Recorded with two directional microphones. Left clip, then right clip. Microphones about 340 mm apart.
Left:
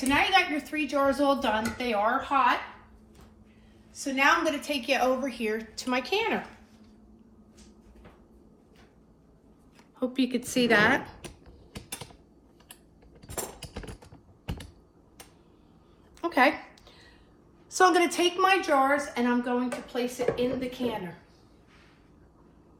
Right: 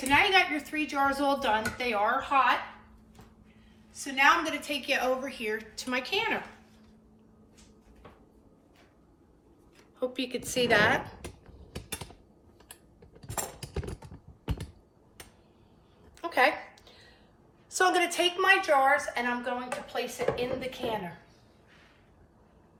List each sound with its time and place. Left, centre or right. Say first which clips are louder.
0.1 s a woman's voice: even; centre
3.9 s a woman's voice: even; centre
10.0 s a woman's voice: left 3 dB; centre
16.2 s a sound: left 2 dB; centre
17.7 s a woman's voice: left 4 dB; centre